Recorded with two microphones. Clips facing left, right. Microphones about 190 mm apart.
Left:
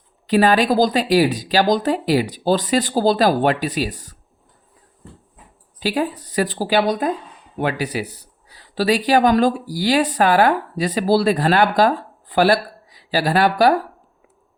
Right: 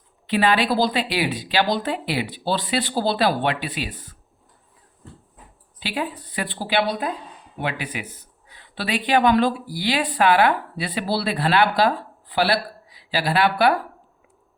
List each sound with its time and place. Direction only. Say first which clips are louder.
0.3 s speech: left 4 dB; 40° left (ahead or behind)
5.8 s speech: left 6 dB; 40° left (ahead or behind)